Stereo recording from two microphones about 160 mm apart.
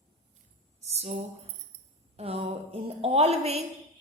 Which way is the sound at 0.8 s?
40° right (ahead or behind).